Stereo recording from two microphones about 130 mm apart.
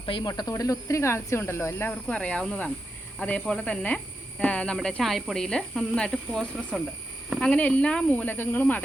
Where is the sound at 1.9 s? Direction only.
5° left (ahead or behind).